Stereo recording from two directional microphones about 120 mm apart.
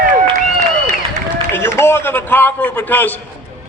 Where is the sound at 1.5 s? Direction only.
20° left (ahead or behind).